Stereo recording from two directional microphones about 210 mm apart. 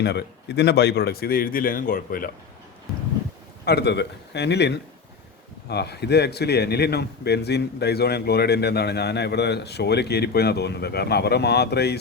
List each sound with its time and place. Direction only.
0.0 s a man's voice: 50° left (ahead or behind)
3.7 s a man's voice: 50° left (ahead or behind)